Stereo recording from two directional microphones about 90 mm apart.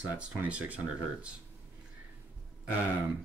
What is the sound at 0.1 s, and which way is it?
Speech, 15° right (ahead or behind).